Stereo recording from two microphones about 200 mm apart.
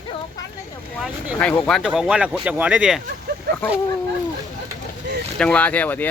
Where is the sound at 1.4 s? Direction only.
5° left (ahead or behind).